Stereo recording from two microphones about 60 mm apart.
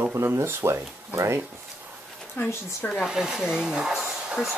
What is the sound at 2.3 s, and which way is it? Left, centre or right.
Speech, left.